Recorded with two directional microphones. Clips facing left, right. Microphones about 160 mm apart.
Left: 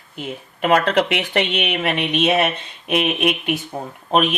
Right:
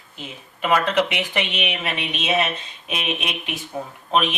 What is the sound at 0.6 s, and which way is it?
Speech, 50° left (ahead or behind).